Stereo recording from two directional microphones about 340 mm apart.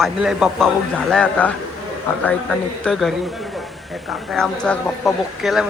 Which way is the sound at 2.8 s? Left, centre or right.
Centre.